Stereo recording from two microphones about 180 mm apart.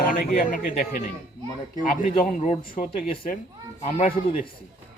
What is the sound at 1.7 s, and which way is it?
Speech, 45° left (ahead or behind).